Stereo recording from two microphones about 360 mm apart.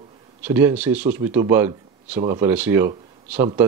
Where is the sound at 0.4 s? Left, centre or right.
Centre.